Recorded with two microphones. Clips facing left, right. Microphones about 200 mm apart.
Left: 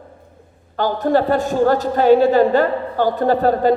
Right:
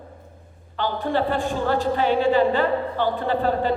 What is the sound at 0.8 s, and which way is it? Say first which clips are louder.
A woman's voice: left 6 dB; 40° left (ahead or behind).